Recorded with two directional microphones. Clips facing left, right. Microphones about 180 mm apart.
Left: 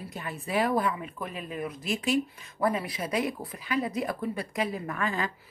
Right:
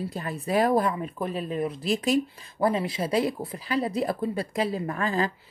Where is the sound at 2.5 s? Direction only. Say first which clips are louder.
Right 3 dB; 25° right (ahead or behind).